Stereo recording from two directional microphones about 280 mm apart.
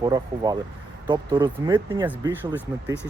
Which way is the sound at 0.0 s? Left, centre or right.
Centre.